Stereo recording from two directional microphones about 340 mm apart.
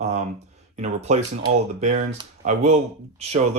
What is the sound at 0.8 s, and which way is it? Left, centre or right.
Speech, centre.